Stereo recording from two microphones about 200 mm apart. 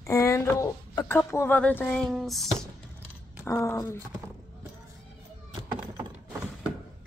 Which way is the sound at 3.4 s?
15° left (ahead or behind).